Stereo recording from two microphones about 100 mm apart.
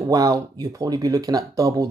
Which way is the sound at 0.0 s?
35° right (ahead or behind).